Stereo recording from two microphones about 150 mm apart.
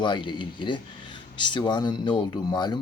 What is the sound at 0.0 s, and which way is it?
Speech, 30° left (ahead or behind).